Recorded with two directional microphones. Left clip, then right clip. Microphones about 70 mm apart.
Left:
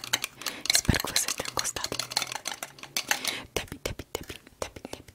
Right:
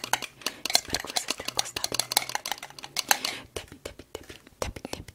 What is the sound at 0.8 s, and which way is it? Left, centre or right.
Stir, left.